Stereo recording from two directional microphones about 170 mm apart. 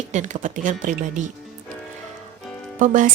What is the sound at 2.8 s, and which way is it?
Speech, 50° right (ahead or behind).